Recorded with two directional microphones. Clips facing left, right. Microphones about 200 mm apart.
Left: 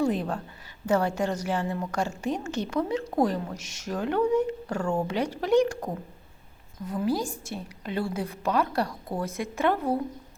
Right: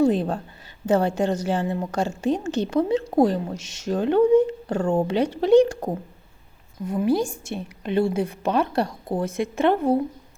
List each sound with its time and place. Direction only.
0.0 s a woman's voice: 30° right (ahead or behind)